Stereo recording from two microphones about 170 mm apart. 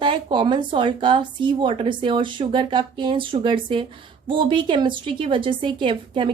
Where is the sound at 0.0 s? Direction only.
30° right (ahead or behind).